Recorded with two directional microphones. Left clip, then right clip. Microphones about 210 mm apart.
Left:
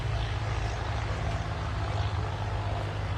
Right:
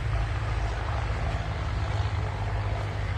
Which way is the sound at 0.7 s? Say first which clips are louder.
Right 1 dB; 35° right (ahead or behind).